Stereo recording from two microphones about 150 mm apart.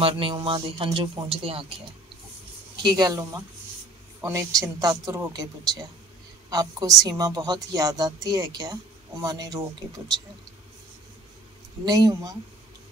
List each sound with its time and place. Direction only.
0.0 s speech: 35° right (ahead or behind)
2.7 s a woman's voice: 30° right (ahead or behind)
11.8 s a woman's voice: 25° right (ahead or behind)